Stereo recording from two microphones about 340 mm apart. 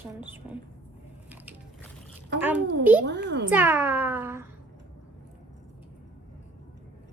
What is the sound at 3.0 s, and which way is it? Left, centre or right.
Speech, right.